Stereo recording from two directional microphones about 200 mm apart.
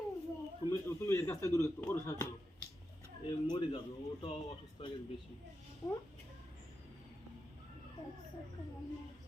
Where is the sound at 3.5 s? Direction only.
20° left (ahead or behind).